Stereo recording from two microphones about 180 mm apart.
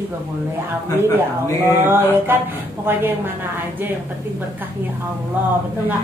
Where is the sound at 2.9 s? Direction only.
10° right (ahead or behind).